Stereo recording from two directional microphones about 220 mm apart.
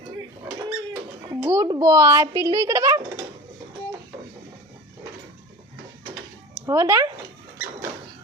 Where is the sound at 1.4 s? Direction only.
15° right (ahead or behind).